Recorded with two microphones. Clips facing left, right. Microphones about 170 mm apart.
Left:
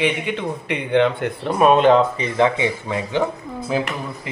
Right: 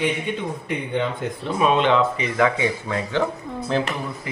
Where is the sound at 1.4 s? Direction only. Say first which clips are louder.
Left 5 dB; 50° left (ahead or behind); by 2.5 s 30° left (ahead or behind).